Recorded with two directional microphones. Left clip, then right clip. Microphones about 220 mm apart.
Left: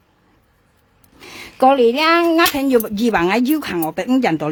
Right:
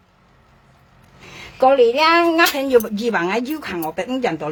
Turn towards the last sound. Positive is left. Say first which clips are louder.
# left 4 dB
turn(degrees=55)  # may be behind; listen again after turning